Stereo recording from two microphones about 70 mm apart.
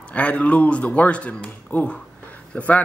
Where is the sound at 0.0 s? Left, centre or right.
Centre.